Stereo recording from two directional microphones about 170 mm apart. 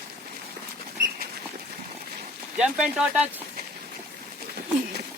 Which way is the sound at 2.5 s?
5° right (ahead or behind).